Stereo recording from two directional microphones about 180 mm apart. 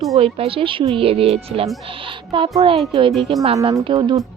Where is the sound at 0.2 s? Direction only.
30° right (ahead or behind).